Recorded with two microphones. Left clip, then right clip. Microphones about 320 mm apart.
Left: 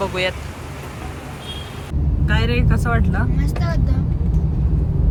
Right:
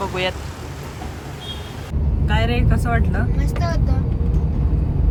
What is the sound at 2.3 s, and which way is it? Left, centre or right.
Speech, centre.